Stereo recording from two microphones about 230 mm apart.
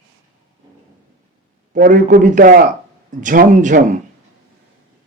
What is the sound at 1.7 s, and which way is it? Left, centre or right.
A man's voice, right.